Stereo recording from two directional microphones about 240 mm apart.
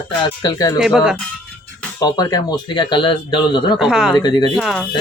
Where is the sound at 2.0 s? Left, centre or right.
Centre.